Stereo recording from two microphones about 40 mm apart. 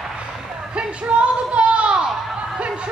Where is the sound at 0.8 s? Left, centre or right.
Right.